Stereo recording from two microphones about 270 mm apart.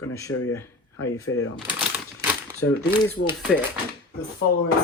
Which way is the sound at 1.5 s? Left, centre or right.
Centre.